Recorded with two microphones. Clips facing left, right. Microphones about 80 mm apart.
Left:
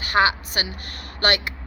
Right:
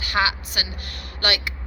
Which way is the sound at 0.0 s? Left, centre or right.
Left.